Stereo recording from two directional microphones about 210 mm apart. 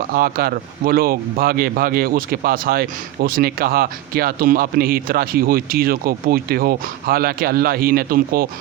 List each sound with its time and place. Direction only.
0.1 s speech: 45° right (ahead or behind)